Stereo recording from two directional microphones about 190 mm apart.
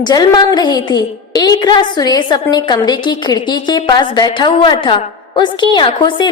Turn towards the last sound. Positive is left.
turn(degrees=25)  # may be behind; listen again after turning